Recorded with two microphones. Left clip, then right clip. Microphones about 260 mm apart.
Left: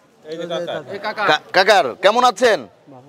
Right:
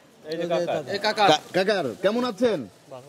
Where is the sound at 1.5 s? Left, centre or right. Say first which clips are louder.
Left 10 dB; left.